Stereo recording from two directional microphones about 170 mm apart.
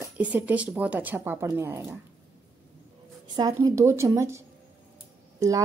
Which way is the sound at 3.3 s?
20° right (ahead or behind).